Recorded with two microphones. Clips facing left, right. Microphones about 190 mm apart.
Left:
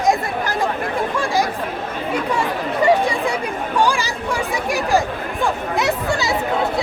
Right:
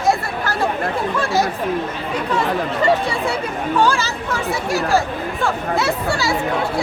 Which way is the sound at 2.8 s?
15° left (ahead or behind).